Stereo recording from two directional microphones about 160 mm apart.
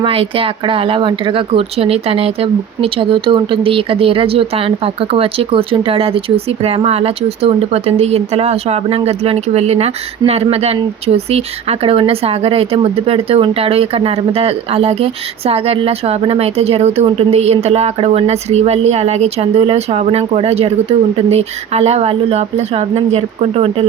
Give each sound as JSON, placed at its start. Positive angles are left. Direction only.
{"t": 0.0, "sound": "speech", "side_deg": -35}